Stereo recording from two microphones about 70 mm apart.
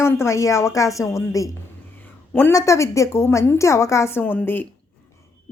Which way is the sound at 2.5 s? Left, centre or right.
Left.